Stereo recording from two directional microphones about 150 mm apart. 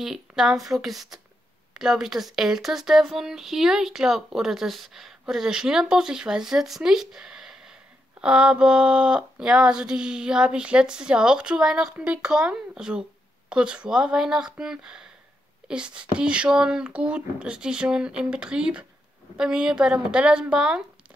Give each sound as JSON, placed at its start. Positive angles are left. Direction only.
{"t": 0.0, "sound": "speech", "side_deg": 0}